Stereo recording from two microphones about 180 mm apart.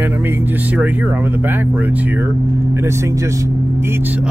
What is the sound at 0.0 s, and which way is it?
Speech, 10° right (ahead or behind).